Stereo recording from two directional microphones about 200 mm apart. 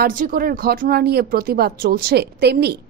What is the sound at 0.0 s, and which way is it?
Speech, 45° right (ahead or behind).